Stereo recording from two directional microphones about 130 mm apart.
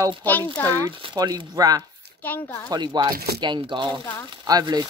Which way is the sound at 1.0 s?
30° right (ahead or behind).